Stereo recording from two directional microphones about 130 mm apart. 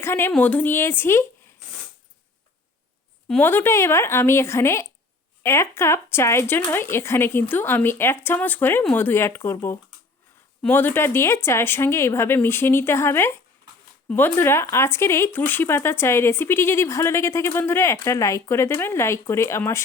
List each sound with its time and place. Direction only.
0.0 s speech: 20° left (ahead or behind)
3.2 s speech: 15° left (ahead or behind)